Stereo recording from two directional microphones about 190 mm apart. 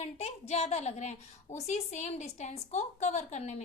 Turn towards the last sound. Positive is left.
turn(degrees=35)  # may be behind; listen again after turning